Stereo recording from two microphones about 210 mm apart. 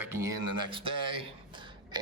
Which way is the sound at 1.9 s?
20° right (ahead or behind).